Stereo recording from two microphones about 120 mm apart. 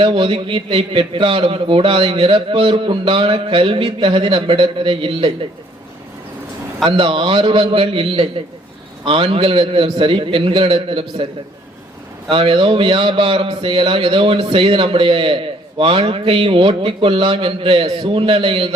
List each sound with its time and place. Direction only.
0.0 s a man's voice: 50° right (ahead or behind)
6.8 s a man's voice: 45° right (ahead or behind)
12.3 s a man's voice: 45° right (ahead or behind)